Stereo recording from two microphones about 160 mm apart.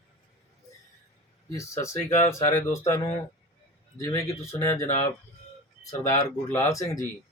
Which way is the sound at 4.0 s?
20° left (ahead or behind).